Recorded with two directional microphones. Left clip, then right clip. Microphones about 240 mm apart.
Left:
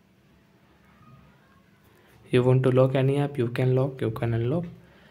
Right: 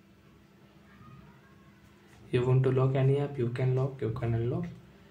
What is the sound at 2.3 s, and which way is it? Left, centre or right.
Speech, left.